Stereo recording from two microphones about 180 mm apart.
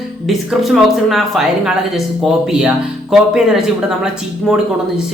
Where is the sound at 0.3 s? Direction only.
Centre (ahead or behind).